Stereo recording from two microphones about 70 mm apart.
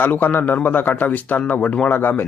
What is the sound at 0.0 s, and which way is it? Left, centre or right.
Speech, left.